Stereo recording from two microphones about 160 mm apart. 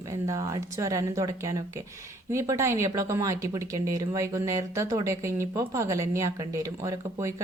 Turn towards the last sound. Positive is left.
turn(degrees=-20)  # may be behind; listen again after turning